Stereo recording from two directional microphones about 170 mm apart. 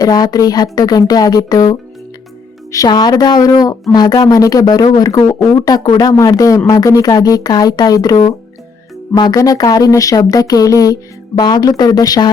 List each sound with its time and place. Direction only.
0.0 s speech: 20° left (ahead or behind)